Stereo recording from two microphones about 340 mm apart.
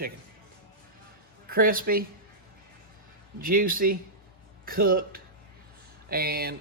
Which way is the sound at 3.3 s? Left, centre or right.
Right.